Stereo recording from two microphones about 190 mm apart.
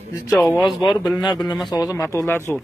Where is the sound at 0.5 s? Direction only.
Centre (ahead or behind).